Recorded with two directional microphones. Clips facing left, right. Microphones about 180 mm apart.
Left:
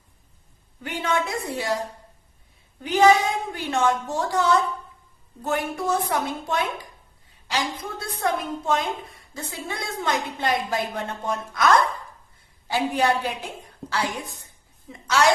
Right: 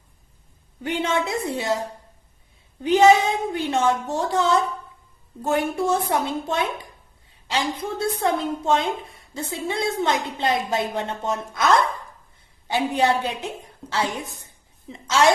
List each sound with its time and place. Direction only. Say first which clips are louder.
0.8 s a woman's voice: right 2 dB; 25° right (ahead or behind)
2.8 s a woman's voice: right 2 dB; 25° right (ahead or behind)
15.0 s a woman's voice: right 2 dB; 25° right (ahead or behind)